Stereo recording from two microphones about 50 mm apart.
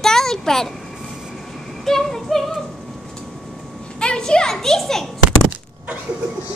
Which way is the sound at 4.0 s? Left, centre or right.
Centre.